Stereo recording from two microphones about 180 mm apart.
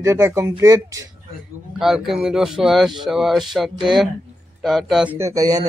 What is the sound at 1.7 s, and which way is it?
Speech, centre (ahead or behind).